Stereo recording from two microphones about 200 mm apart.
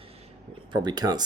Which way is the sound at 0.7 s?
20° right (ahead or behind).